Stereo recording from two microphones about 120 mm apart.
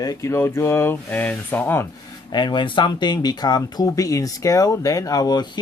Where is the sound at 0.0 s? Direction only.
25° left (ahead or behind).